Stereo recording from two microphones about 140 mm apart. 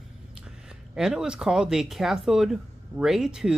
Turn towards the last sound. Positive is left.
turn(degrees=-5)  # may be behind; listen again after turning